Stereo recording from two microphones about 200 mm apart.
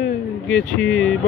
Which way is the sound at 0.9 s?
80° left.